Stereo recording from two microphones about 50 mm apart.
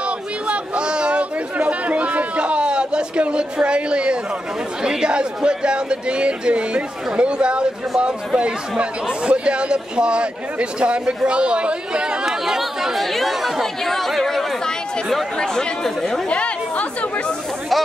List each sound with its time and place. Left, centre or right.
0.5 s chatter: centre
4.8 s speech: centre
12.3 s speech: centre
15.5 s speech: centre
16.3 s speech: left